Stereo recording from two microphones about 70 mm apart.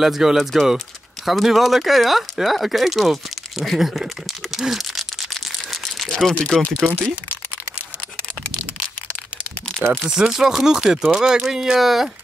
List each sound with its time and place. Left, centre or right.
0.0 s speech: centre
6.6 s speech: right
10.0 s speech: centre